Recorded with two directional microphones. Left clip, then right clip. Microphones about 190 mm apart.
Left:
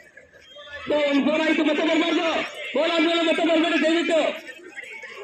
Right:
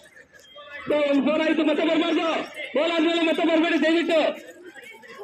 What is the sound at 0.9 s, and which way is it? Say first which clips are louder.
A man's voice: even; 55° left (ahead or behind).